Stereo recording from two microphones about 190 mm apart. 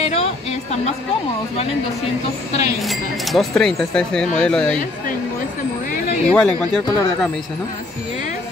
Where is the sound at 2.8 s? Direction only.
Centre (ahead or behind).